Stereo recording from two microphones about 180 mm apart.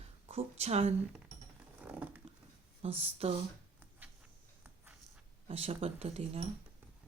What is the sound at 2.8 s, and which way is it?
Speech, 35° right (ahead or behind).